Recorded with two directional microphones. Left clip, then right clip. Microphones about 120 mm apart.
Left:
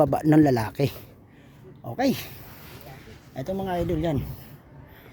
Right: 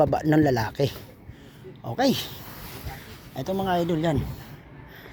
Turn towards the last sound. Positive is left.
turn(degrees=25)  # may be behind; listen again after turning